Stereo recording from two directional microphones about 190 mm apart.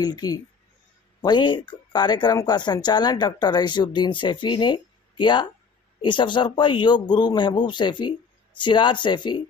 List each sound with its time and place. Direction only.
0.0 s speech: 20° left (ahead or behind)